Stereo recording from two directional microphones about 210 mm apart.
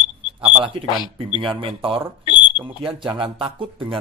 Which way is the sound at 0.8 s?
20° left (ahead or behind).